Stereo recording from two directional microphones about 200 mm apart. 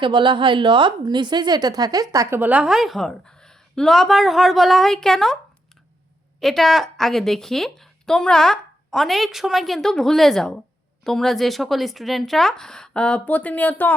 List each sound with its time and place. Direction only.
0.0 s a woman's voice: 25° right (ahead or behind); by 5.4 s centre (ahead or behind)
6.4 s a woman's voice: centre (ahead or behind)